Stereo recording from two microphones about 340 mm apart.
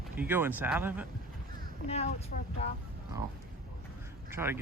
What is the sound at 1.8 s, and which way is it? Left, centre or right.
Speech, centre.